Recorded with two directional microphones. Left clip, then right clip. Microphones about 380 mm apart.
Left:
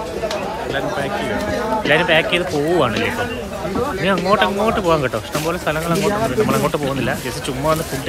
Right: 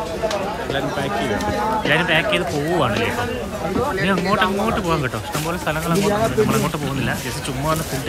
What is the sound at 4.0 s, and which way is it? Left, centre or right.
Speech, centre.